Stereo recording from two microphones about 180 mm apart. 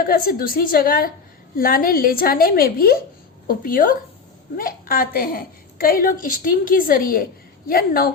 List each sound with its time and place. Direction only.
0.0 s a woman's voice: 55° left (ahead or behind)